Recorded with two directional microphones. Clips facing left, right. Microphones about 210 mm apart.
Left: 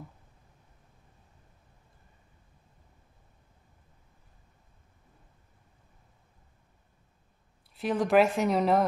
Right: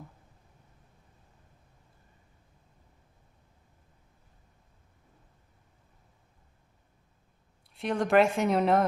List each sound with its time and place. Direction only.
7.7 s a woman's voice: centre (ahead or behind)